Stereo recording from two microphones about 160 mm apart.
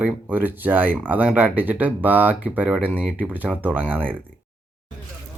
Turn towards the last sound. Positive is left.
turn(degrees=-10)  # may be behind; listen again after turning